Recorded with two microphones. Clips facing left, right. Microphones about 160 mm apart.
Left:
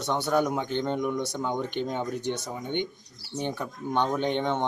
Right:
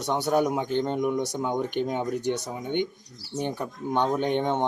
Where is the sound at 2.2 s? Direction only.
40° right (ahead or behind).